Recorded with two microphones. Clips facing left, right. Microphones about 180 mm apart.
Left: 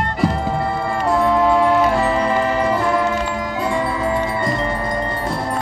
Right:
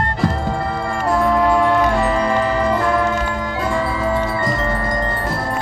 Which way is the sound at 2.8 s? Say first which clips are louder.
Even; 20° left (ahead or behind).